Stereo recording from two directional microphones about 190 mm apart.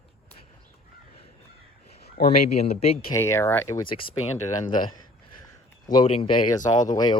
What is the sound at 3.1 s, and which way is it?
Speech, 15° left (ahead or behind).